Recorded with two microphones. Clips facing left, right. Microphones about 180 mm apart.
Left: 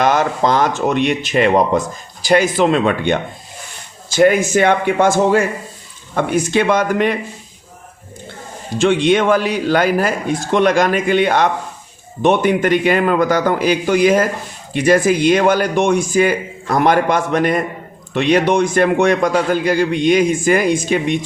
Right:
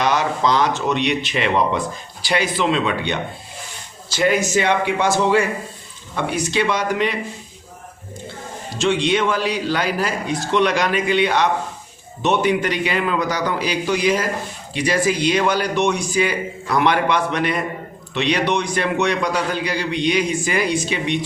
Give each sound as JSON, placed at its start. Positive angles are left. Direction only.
{"t": 0.0, "sound": "a man's voice", "side_deg": 50}
{"t": 8.8, "sound": "a man's voice", "side_deg": 55}